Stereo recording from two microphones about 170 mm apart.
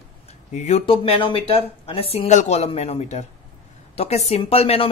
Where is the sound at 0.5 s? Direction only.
40° left (ahead or behind).